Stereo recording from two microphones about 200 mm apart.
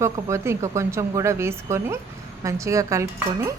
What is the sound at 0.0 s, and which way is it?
A woman's voice, 15° right (ahead or behind).